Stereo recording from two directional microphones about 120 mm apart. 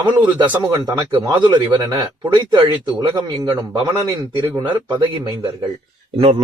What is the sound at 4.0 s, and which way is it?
Speech, 25° right (ahead or behind).